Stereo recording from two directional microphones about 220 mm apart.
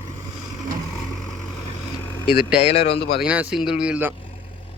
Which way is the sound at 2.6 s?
30° left (ahead or behind).